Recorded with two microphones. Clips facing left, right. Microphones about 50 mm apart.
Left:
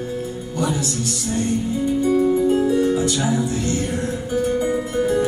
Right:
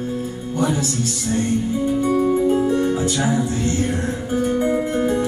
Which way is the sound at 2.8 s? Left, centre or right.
Right.